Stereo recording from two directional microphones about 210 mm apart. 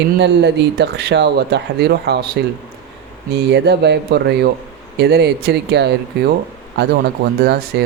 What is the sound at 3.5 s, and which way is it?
Speech, 55° right (ahead or behind).